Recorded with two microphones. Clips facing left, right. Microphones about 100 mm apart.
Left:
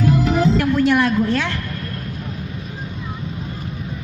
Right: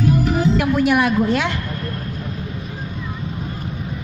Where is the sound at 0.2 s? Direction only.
90° left.